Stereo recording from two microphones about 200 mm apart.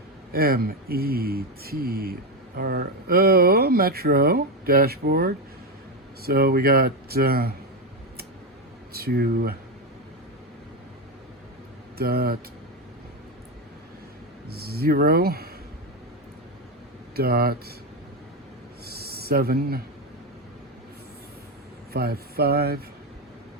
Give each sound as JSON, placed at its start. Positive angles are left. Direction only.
{"t": 0.3, "sound": "speech", "side_deg": -50}
{"t": 9.0, "sound": "speech", "side_deg": -50}
{"t": 11.9, "sound": "speech", "side_deg": -50}
{"t": 14.5, "sound": "speech", "side_deg": -50}
{"t": 17.2, "sound": "speech", "side_deg": -50}
{"t": 19.0, "sound": "speech", "side_deg": -50}
{"t": 21.9, "sound": "speech", "side_deg": -50}